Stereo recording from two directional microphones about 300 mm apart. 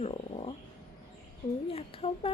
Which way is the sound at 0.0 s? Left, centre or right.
Centre.